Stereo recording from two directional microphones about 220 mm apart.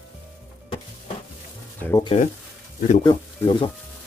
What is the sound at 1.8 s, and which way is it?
Speech, 10° left (ahead or behind).